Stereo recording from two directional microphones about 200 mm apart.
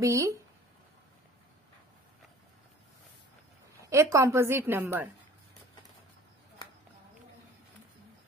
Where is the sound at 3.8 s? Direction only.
15° right (ahead or behind).